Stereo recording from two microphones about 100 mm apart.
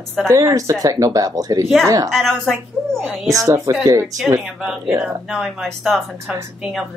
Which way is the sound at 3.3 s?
30° right (ahead or behind).